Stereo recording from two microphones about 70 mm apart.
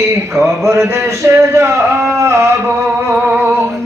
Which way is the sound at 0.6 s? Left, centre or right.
Right.